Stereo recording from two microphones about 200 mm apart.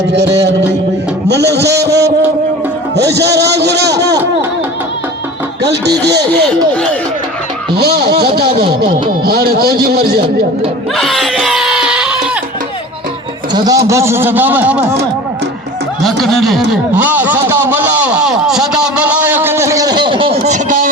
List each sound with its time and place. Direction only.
0.1 s a man's voice: 60° right (ahead or behind)
2.9 s music: 55° right (ahead or behind)
7.8 s speech: 50° right (ahead or behind)
10.9 s a sound: centre (ahead or behind)
13.5 s a man's voice: 15° right (ahead or behind)
16.0 s a sound: centre (ahead or behind); by 20.9 s 40° right (ahead or behind)